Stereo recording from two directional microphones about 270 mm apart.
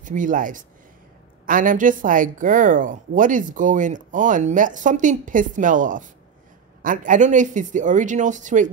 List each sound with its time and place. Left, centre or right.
0.0 s a woman's voice: right